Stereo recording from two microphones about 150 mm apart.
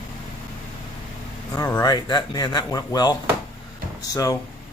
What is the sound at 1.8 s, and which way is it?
Speech, 25° left (ahead or behind).